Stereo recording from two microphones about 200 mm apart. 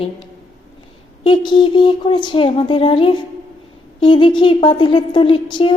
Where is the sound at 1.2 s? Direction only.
25° left (ahead or behind).